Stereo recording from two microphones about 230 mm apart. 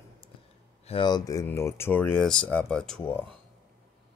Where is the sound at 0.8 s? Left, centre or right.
Left.